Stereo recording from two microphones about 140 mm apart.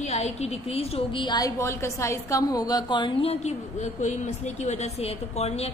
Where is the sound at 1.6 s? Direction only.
20° left (ahead or behind).